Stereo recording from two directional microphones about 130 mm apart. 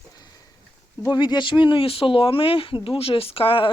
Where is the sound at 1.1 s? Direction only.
35° left (ahead or behind).